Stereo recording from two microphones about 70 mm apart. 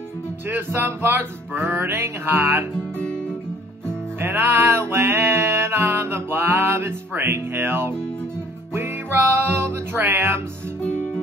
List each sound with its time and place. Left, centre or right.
0.5 s music: right
4.2 s music: right
9.4 s music: right